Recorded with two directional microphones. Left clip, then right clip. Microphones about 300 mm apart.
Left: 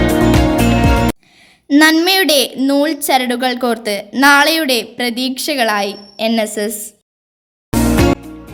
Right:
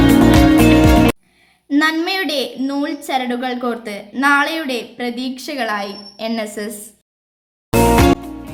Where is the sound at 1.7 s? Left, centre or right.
Left.